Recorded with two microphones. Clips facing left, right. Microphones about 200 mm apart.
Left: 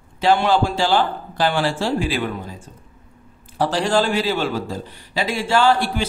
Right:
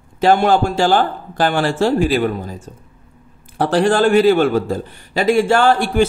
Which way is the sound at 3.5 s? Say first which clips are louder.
Right 4 dB; 55° right (ahead or behind).